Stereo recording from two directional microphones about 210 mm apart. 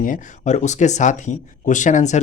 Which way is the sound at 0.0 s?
40° left (ahead or behind).